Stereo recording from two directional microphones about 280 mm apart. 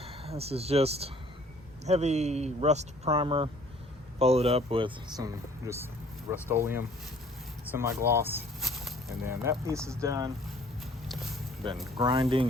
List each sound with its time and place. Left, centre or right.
0.0 s speech: right
11.9 s speech: centre